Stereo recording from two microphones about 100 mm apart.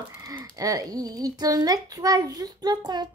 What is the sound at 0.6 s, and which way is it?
A child's voice, 40° right (ahead or behind).